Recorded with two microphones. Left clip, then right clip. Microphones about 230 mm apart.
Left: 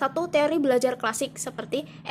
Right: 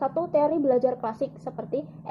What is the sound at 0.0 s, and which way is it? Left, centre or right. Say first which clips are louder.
Speech: even; left.